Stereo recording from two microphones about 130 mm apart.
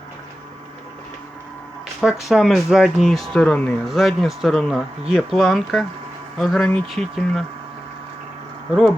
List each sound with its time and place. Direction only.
2.0 s speech: centre (ahead or behind)